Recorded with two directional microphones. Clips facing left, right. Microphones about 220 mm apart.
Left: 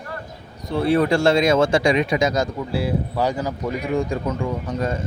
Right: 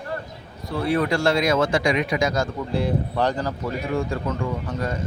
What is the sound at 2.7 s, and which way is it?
Speech, 5° left (ahead or behind).